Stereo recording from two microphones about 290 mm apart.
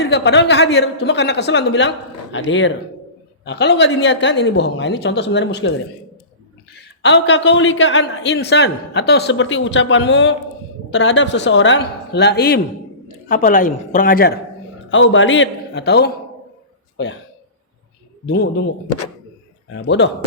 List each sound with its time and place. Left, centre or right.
0.0 s a man's voice: left
7.0 s a man's voice: left
19.7 s a man's voice: left